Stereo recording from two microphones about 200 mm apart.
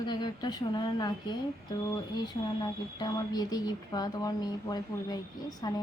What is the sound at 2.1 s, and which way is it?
Speech, 20° left (ahead or behind).